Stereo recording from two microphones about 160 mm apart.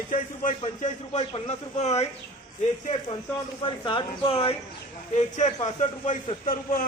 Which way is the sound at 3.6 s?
30° left (ahead or behind).